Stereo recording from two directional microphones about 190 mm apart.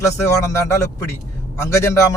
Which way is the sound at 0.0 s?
15° left (ahead or behind).